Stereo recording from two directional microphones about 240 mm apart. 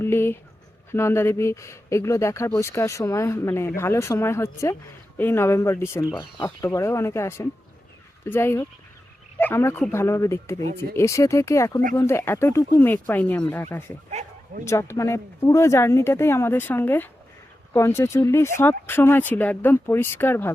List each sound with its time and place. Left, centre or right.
0.0 s a sound: centre
0.9 s speech: centre
14.1 s bow-wow: right
14.6 s speech: centre